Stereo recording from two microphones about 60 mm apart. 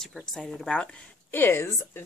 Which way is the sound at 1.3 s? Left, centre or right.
Left.